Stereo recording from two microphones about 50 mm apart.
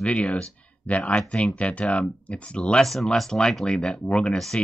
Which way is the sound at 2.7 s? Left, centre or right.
Centre.